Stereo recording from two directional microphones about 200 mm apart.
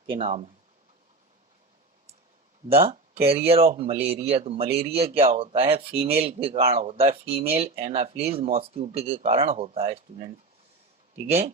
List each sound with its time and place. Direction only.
0.1 s speech: 30° right (ahead or behind)
2.9 s speech: 30° right (ahead or behind)
11.3 s speech: 30° right (ahead or behind)